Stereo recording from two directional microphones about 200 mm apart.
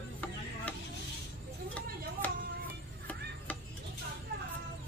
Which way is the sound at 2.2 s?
10° left (ahead or behind).